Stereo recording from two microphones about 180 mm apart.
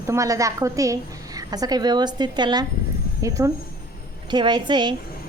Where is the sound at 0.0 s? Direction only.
15° right (ahead or behind).